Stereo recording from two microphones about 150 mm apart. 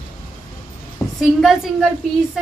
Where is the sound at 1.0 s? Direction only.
20° left (ahead or behind).